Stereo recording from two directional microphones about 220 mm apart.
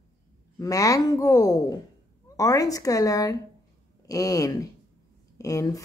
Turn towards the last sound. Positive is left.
turn(degrees=15)  # may be behind; listen again after turning